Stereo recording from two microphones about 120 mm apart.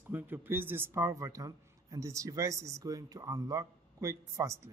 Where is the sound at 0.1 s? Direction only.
15° right (ahead or behind).